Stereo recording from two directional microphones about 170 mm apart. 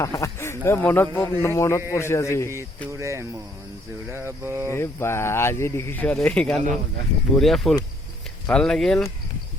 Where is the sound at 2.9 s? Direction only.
15° right (ahead or behind).